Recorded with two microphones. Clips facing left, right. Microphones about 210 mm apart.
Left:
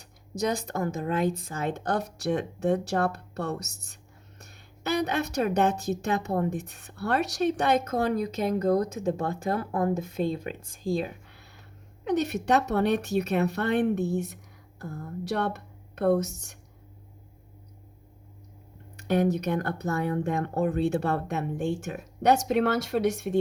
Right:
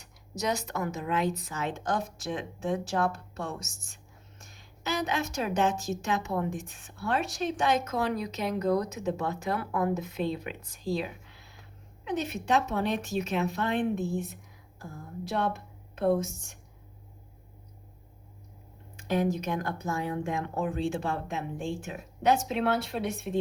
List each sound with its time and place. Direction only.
0.0 s a woman's voice: 55° left (ahead or behind)
4.4 s music: 60° left (ahead or behind)
5.5 s a woman's voice: 60° left (ahead or behind)
12.1 s a woman's voice: 70° left (ahead or behind)
19.0 s a woman's voice: 60° left (ahead or behind)
21.5 s speech: 75° left (ahead or behind)
22.4 s speech: 45° left (ahead or behind)